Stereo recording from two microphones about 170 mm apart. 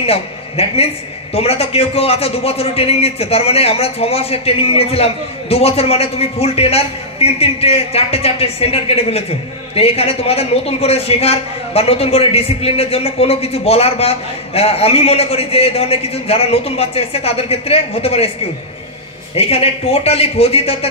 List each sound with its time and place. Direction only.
0.0 s a man's voice: 35° left (ahead or behind)
19.3 s a woman's voice: 35° left (ahead or behind)